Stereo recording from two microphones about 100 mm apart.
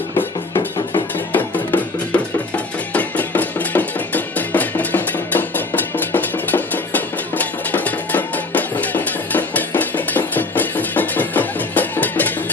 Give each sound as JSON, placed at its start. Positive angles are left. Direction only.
{"t": 1.3, "sound": "music", "side_deg": 15}